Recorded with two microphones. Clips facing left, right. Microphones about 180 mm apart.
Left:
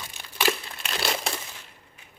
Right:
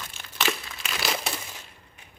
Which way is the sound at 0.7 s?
Centre (ahead or behind).